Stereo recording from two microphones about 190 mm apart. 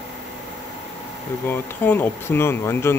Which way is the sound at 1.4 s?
10° left (ahead or behind).